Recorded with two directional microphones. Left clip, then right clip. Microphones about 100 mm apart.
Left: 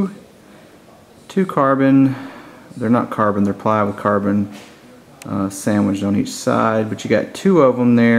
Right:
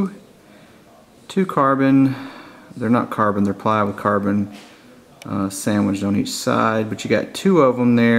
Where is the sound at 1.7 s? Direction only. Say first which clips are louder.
Left 2 dB; 35° right (ahead or behind).